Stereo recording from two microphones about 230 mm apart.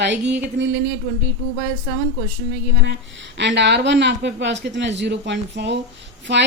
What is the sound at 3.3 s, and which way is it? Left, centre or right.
A woman's voice, right.